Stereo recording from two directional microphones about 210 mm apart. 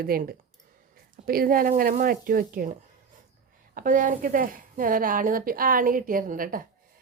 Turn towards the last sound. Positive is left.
turn(degrees=-40)  # may be behind; listen again after turning